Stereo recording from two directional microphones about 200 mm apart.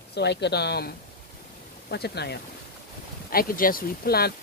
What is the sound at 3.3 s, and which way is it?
Speech, 45° left (ahead or behind).